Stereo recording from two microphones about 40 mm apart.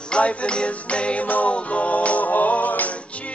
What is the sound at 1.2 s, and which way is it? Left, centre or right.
Music, left.